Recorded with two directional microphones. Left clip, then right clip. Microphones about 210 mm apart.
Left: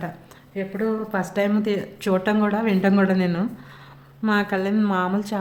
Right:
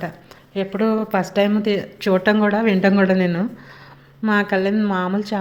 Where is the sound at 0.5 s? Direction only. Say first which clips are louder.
Right 5 dB; 35° right (ahead or behind).